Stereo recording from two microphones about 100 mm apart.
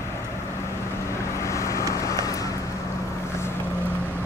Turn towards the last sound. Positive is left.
turn(degrees=35)  # may be behind; listen again after turning